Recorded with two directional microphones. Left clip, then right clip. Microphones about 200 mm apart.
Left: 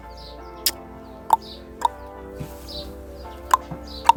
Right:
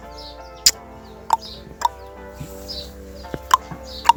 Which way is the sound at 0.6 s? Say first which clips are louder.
Right 9 dB; 15° left (ahead or behind).